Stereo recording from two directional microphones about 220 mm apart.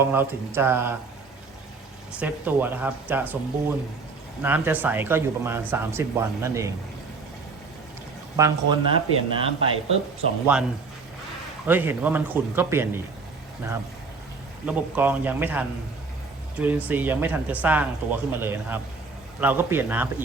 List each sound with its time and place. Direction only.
0.0 s speech: 10° right (ahead or behind)
2.1 s speech: 5° right (ahead or behind)
8.4 s speech: 15° right (ahead or behind)
8.9 s speech: 25° right (ahead or behind)
10.4 s speech: 5° right (ahead or behind)
14.7 s speech: 5° right (ahead or behind)